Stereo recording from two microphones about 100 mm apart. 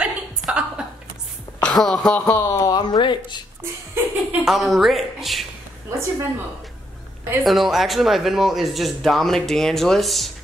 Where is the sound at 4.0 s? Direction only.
25° right (ahead or behind).